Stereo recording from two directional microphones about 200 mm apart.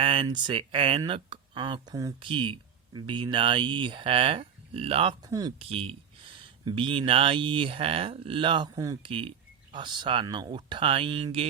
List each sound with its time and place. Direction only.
0.0 s speech: 25° right (ahead or behind)